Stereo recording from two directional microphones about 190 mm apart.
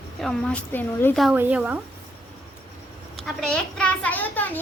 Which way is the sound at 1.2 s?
10° right (ahead or behind).